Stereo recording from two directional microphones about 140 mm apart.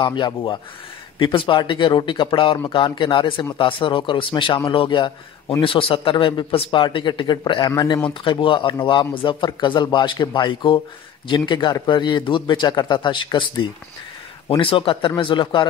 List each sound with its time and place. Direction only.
0.0 s speech: 35° left (ahead or behind)